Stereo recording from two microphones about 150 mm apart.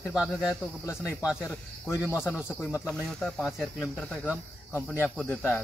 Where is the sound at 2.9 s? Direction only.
5° left (ahead or behind).